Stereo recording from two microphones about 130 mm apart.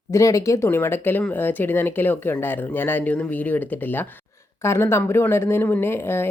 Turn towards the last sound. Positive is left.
turn(degrees=15)  # may be behind; listen again after turning